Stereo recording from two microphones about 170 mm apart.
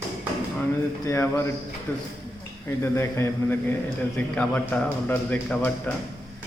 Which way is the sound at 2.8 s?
15° left (ahead or behind).